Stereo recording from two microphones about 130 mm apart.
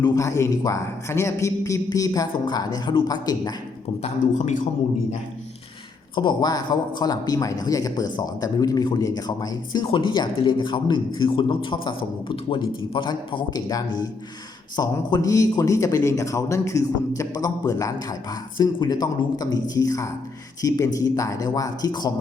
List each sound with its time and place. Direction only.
0.0 s a man's voice: 25° left (ahead or behind)
4.0 s speech: 60° left (ahead or behind)
6.1 s a man's voice: 35° left (ahead or behind)